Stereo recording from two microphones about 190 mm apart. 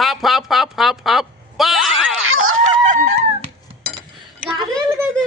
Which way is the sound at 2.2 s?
90° right.